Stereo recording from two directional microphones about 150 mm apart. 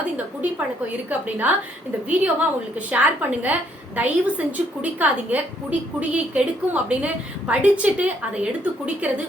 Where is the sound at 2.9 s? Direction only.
10° right (ahead or behind).